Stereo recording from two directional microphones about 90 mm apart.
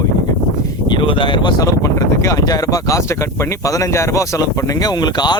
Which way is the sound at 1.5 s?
40° left (ahead or behind).